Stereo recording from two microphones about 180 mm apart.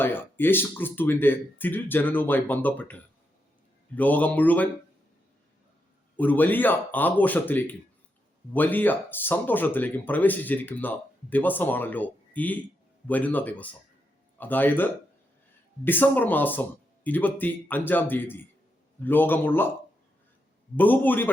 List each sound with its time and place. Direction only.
0.0 s speech: 10° left (ahead or behind)
6.1 s speech: 10° left (ahead or behind)
20.7 s speech: 10° left (ahead or behind)